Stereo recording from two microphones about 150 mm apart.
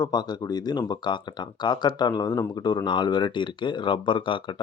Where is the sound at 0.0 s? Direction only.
25° left (ahead or behind).